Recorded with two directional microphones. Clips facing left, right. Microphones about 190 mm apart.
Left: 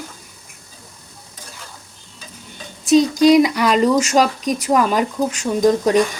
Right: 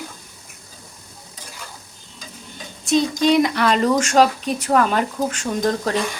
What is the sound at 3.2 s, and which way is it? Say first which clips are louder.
Speech: left 5 dB; 10° left (ahead or behind).